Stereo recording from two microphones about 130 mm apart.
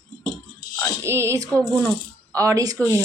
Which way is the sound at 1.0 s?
20° right (ahead or behind).